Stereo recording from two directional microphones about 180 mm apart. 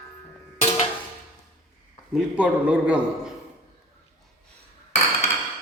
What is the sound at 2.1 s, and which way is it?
A man's voice, 5° right (ahead or behind).